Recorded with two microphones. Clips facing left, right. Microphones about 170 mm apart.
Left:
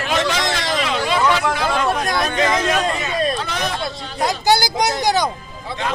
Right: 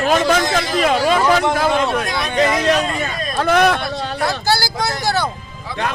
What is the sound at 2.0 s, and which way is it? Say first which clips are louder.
Speech: left 2 dB; 45° left (ahead or behind).